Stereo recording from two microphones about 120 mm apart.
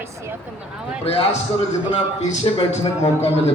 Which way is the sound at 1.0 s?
55° left (ahead or behind).